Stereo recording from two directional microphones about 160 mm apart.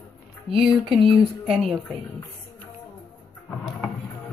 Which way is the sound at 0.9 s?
Centre (ahead or behind).